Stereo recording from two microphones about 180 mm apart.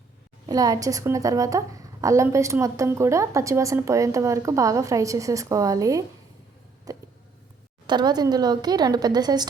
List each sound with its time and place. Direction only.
0.4 s a woman's voice: 20° right (ahead or behind)
6.9 s a sound: 20° right (ahead or behind)
7.9 s a woman's voice: 25° right (ahead or behind)